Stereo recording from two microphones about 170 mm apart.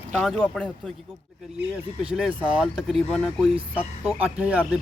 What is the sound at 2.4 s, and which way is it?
Speech, 5° right (ahead or behind).